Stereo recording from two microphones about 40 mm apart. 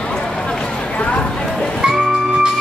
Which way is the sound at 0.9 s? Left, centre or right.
Left.